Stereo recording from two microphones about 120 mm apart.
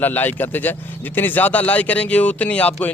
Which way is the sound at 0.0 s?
15° left (ahead or behind).